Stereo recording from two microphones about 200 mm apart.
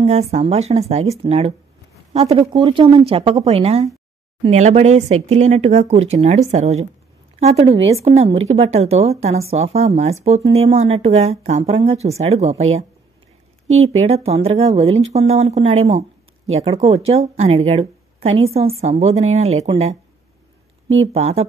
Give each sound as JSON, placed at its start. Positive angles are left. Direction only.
{"t": 0.0, "sound": "speech", "side_deg": -30}
{"t": 13.9, "sound": "speech", "side_deg": -30}
{"t": 21.0, "sound": "speech", "side_deg": -30}